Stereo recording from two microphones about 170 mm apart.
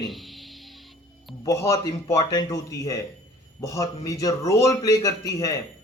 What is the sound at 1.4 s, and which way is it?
A man's voice, 20° left (ahead or behind).